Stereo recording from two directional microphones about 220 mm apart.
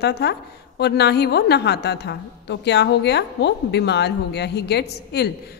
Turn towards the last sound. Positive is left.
turn(degrees=50)  # may be behind; listen again after turning